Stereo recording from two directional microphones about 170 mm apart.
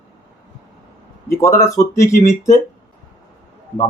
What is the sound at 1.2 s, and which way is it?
Speech, 15° left (ahead or behind).